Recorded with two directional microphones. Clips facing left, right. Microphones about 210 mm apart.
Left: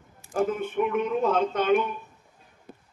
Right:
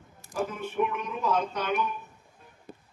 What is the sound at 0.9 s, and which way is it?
Speech, 55° left (ahead or behind).